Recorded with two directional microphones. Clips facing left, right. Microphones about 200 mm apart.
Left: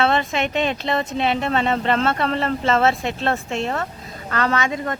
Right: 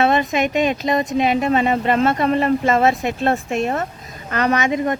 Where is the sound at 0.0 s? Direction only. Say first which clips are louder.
Right 3 dB; 15° right (ahead or behind).